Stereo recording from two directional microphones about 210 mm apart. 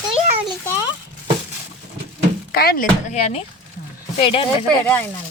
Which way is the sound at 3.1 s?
30° left (ahead or behind).